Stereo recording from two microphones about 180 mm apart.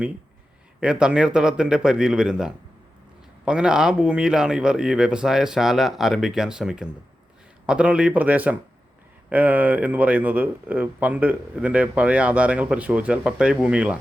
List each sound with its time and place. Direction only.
0.8 s speech: 5° right (ahead or behind)